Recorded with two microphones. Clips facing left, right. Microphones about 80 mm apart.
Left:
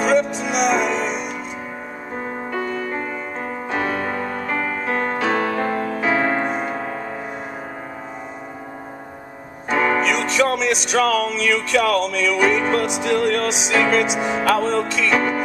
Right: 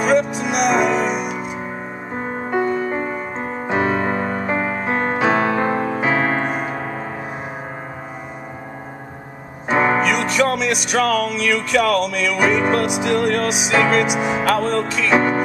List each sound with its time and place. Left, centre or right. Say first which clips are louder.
0.0 s music: right 1 dB; centre
2.1 s music: right 5 dB; right
9.7 s music: right 2 dB; right
9.9 s music: right 1 dB; centre